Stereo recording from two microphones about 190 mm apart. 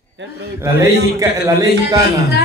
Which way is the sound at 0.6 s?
15° right (ahead or behind).